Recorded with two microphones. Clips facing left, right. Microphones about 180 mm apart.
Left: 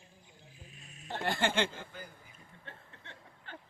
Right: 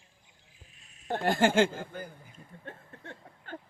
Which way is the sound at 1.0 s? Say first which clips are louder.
Right 7 dB; 50° right (ahead or behind).